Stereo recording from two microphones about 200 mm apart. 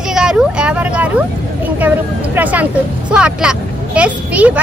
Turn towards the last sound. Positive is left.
turn(degrees=-5)  # may be behind; listen again after turning